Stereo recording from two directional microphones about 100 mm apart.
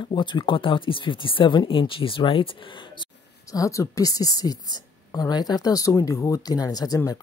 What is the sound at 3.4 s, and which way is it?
A woman's voice, 35° left (ahead or behind).